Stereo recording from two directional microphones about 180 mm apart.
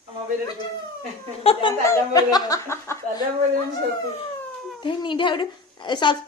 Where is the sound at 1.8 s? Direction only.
20° left (ahead or behind).